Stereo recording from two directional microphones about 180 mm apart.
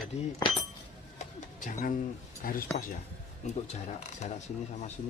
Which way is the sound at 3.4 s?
40° left (ahead or behind).